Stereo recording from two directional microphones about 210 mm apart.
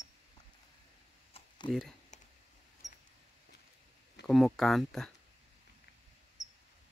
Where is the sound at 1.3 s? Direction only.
20° left (ahead or behind).